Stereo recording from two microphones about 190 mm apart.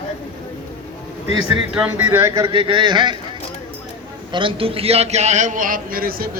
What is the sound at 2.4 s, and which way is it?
Speech, 25° right (ahead or behind).